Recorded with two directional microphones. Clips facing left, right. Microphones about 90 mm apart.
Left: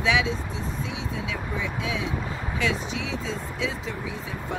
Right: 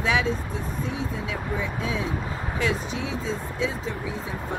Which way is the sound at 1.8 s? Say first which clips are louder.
Right 1 dB; 40° right (ahead or behind).